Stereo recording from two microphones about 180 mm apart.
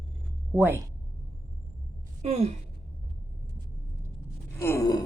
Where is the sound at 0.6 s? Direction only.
10° right (ahead or behind).